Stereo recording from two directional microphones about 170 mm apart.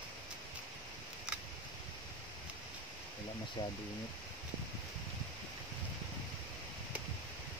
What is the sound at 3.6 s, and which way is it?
Speech, 25° left (ahead or behind).